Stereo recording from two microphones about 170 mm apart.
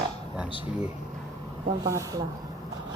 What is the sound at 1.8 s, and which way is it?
Speech, 20° right (ahead or behind).